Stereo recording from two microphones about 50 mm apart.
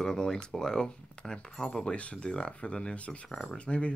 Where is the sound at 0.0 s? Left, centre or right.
Centre.